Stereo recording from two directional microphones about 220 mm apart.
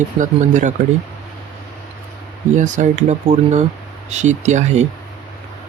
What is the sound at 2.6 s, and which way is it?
Speech, 35° right (ahead or behind).